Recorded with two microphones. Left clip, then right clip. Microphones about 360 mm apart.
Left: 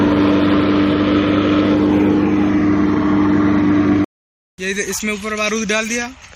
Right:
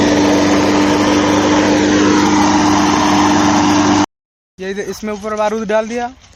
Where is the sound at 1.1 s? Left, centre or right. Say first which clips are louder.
Right 3 dB; right.